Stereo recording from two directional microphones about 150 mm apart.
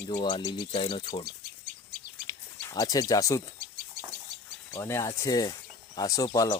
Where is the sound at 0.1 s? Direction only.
30° left (ahead or behind).